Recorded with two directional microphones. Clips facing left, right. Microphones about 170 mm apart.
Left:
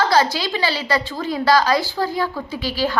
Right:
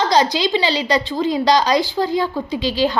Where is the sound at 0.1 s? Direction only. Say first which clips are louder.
Right 2 dB; 20° right (ahead or behind).